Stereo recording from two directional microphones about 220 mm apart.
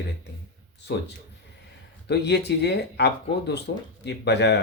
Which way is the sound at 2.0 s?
50° left (ahead or behind).